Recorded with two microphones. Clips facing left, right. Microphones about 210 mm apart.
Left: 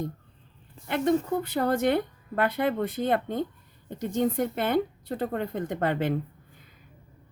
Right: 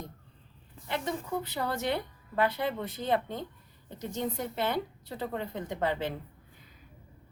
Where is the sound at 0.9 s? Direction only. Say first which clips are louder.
Left 9 dB; 55° left (ahead or behind).